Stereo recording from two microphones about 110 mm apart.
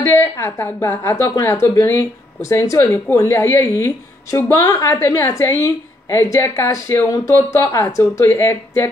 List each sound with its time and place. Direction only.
0.0 s a woman's voice: 25° left (ahead or behind)